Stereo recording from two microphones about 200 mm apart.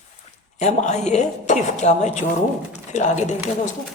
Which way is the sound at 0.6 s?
35° left (ahead or behind).